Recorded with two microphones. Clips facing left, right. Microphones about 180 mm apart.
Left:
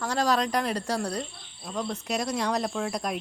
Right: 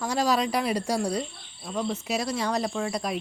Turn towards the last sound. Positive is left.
turn(degrees=0)  # may be behind; listen again after turning